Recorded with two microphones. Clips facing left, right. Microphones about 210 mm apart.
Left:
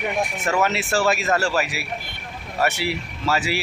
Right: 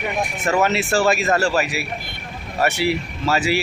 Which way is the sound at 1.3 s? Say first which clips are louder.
Right 3 dB; 20° right (ahead or behind).